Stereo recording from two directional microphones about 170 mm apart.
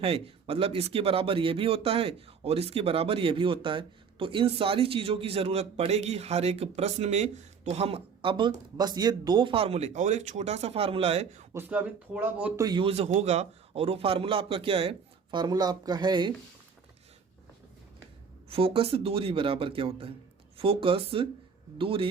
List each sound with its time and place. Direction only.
0.0 s a man's voice: 35° right (ahead or behind)
11.5 s speech: 10° right (ahead or behind)
12.6 s a man's voice: 30° right (ahead or behind)
18.4 s a man's voice: 35° right (ahead or behind)